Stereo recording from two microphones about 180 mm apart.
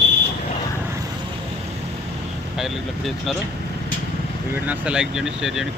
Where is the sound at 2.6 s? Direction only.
Centre (ahead or behind).